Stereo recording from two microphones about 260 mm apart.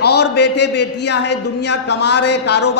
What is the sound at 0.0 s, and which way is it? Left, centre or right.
A man's voice, left.